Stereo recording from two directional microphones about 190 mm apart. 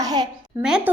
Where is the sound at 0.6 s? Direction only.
5° right (ahead or behind).